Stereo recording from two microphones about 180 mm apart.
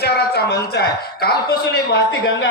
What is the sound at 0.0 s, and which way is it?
A man's voice, 65° left (ahead or behind).